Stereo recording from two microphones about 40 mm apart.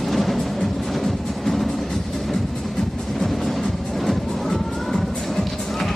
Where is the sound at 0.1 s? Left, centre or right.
Centre.